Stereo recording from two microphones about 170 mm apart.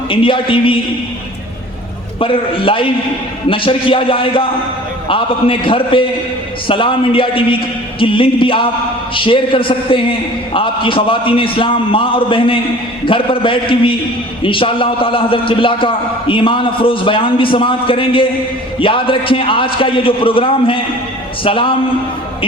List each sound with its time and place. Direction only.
0.1 s a man's voice: 30° left (ahead or behind)
2.1 s a man's voice: 30° left (ahead or behind)